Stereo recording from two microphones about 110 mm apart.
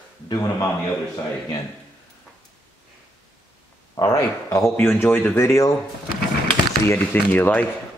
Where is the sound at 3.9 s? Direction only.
30° left (ahead or behind).